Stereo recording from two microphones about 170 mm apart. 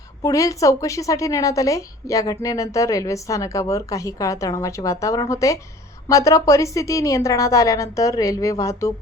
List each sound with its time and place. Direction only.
0.2 s a woman's voice: 20° left (ahead or behind)